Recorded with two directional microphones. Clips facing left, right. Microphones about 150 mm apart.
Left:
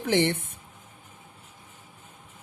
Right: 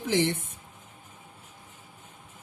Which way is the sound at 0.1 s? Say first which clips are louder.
Left 2 dB; 60° left (ahead or behind).